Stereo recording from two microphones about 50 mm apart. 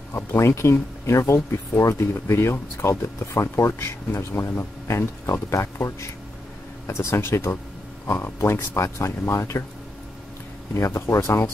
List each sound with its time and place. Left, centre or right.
0.1 s speech: left
1.0 s speech: left
2.1 s speech: left
7.2 s speech: left
10.7 s speech: left